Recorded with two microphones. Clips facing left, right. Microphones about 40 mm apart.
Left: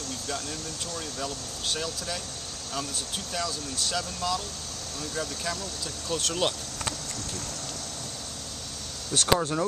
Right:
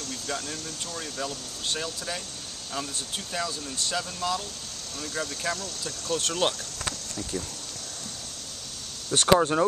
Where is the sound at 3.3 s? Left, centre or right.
Centre.